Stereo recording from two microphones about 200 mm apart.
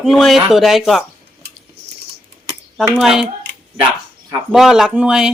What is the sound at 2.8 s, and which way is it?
Speech, 5° right (ahead or behind).